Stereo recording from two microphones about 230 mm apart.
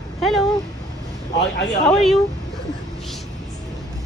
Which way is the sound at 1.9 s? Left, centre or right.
Centre.